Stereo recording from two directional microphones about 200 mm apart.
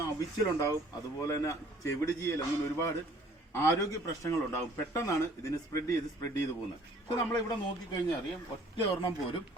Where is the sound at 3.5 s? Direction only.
15° left (ahead or behind).